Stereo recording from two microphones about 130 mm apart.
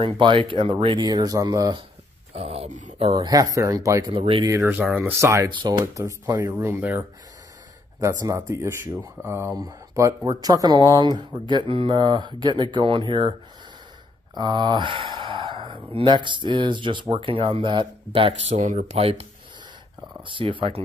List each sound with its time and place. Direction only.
0.0 s speech: 40° right (ahead or behind)
2.3 s a sound: 50° right (ahead or behind)
3.3 s speech: 30° right (ahead or behind)
4.1 s speech: 45° right (ahead or behind)
4.5 s speech: 20° right (ahead or behind)
5.5 s speech: 40° right (ahead or behind)
5.9 s speech: 25° right (ahead or behind)
14.3 s speech: 35° right (ahead or behind)
18.6 s speech: 70° right (ahead or behind)
18.9 s speech: 50° right (ahead or behind)
20.2 s speech: 40° right (ahead or behind)